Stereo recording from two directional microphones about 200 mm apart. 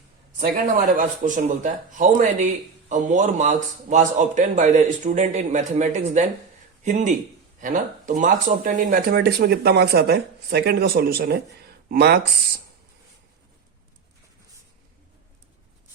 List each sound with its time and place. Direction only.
0.3 s a man's voice: 45° right (ahead or behind)